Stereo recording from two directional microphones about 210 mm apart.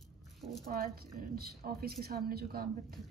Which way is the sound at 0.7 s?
40° right (ahead or behind).